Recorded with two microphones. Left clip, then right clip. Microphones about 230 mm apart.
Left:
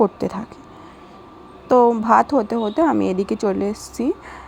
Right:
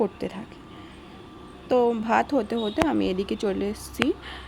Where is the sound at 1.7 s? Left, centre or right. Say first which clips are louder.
Left 8 dB; centre.